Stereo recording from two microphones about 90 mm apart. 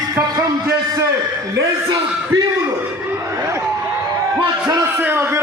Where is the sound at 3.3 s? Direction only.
35° right (ahead or behind).